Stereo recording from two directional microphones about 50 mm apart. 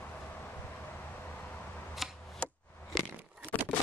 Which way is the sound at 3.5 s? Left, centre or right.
Left.